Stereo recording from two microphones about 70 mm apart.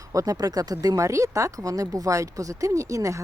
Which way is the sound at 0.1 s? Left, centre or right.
Right.